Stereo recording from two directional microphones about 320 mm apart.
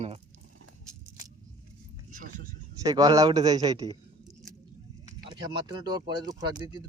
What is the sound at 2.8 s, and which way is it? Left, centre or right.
Speech, centre.